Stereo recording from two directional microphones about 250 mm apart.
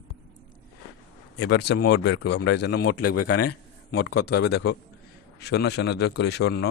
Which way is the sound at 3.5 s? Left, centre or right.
Left.